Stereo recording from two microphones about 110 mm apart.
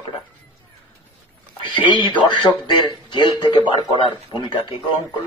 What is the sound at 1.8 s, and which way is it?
Speech, 45° left (ahead or behind).